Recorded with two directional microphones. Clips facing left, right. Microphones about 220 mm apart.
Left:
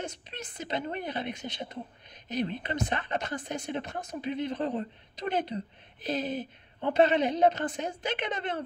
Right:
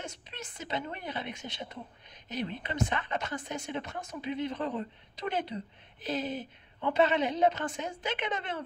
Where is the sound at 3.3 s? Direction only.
40° left (ahead or behind).